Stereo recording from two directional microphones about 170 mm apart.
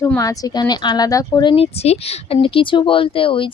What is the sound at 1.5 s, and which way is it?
Speech, 35° left (ahead or behind).